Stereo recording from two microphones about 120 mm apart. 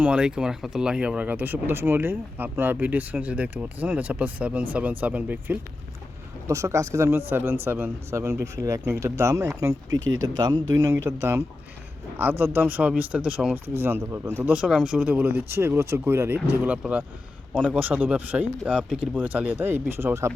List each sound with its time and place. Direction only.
0.0 s speech: 10° right (ahead or behind)
6.5 s a man's voice: 25° right (ahead or behind); by 13.6 s 5° right (ahead or behind)
13.7 s a man's voice: 20° right (ahead or behind)